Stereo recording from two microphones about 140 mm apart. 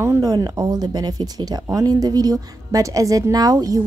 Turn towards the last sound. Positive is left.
turn(degrees=-25)  # may be behind; listen again after turning